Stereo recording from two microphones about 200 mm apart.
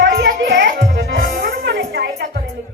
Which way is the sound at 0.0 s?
65° right (ahead or behind).